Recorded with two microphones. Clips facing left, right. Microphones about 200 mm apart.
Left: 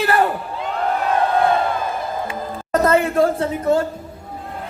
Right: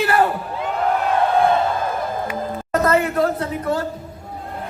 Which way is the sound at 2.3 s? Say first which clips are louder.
Left 1 dB; 25° left (ahead or behind).